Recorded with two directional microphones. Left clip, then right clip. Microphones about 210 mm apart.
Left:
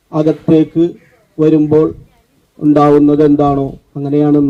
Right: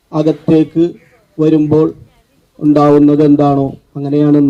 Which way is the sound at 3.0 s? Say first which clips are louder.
Even; 45° right (ahead or behind).